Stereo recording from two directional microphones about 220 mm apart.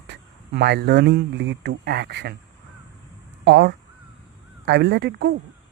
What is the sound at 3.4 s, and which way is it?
Speech, 50° right (ahead or behind).